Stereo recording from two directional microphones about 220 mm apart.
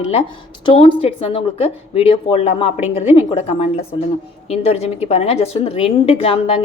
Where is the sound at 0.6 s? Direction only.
20° left (ahead or behind).